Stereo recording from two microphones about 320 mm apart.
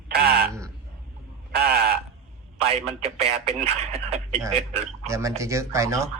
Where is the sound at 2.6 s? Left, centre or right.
Centre.